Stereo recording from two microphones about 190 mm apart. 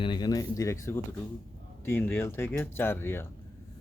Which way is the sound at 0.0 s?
25° left (ahead or behind).